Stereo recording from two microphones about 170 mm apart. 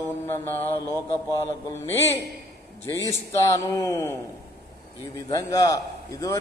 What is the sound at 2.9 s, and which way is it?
Speech, 15° left (ahead or behind).